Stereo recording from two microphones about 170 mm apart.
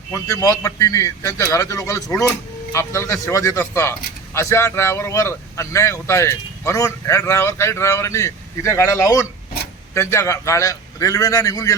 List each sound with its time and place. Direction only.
0.1 s a man's voice: 20° left (ahead or behind)